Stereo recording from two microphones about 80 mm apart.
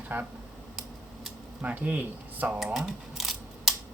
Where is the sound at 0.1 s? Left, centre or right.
Right.